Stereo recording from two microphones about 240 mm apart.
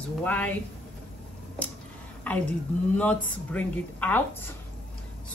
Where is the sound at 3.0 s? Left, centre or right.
Centre.